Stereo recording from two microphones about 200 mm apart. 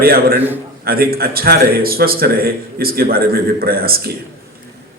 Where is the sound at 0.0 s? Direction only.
50° right (ahead or behind).